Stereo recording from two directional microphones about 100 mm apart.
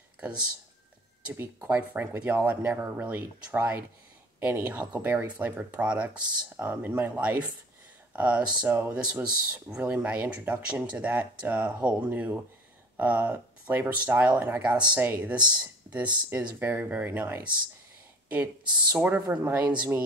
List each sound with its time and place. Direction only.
1.2 s speech: 15° right (ahead or behind)
18.8 s speech: 15° right (ahead or behind)